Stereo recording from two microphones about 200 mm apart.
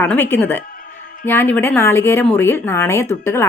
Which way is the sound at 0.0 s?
10° left (ahead or behind).